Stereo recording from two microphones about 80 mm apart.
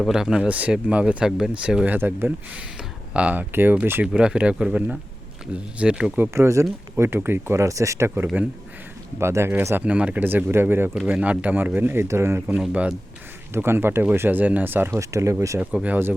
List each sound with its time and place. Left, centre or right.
0.1 s speech: centre
2.0 s speech: right
4.0 s speech: centre
6.3 s speech: right
9.8 s speech: centre
11.0 s speech: centre; by 12.4 s right
12.5 s speech: centre
13.5 s speech: right
14.9 s speech: right
15.7 s speech: centre